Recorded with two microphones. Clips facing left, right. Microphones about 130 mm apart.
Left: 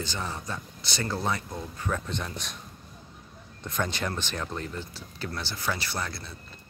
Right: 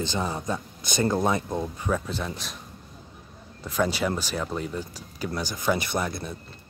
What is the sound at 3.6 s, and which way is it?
Speech, 5° right (ahead or behind).